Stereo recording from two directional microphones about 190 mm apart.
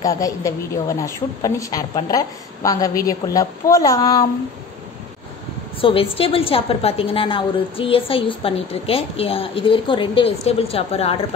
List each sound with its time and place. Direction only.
0.0 s a woman's voice: 15° left (ahead or behind)
5.8 s a woman's voice: 30° left (ahead or behind)